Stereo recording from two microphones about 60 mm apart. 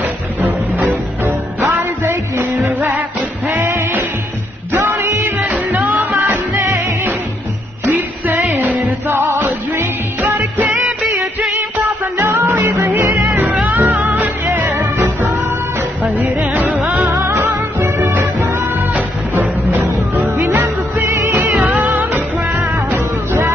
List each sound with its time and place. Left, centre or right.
0.0 s music: right
0.8 s music: right
4.7 s music: right
7.9 s music: right
9.1 s music: right
10.7 s music: centre
11.7 s music: right
13.3 s music: right
16.0 s music: right
17.7 s music: right
20.2 s music: right
21.9 s music: right